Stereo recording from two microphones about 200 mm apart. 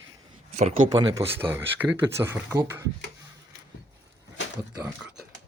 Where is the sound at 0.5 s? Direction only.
30° right (ahead or behind).